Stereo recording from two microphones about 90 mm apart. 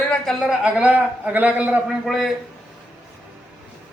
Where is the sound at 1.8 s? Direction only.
5° right (ahead or behind).